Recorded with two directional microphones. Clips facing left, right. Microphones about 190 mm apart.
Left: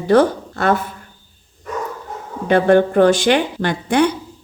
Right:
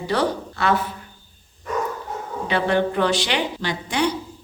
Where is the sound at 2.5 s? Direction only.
50° left (ahead or behind).